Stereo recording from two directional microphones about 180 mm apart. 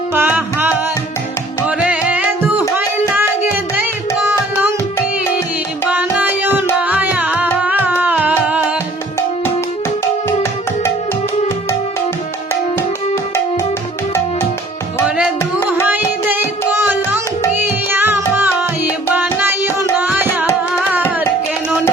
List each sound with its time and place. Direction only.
0.1 s music: 10° right (ahead or behind)
2.7 s tabla: 10° right (ahead or behind)
5.9 s music: 10° right (ahead or behind)
15.8 s music: 10° right (ahead or behind)